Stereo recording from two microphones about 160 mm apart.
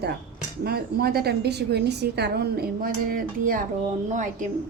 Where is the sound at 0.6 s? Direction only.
75° right (ahead or behind).